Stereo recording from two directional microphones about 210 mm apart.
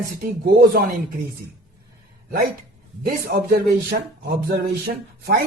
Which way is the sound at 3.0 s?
45° right (ahead or behind).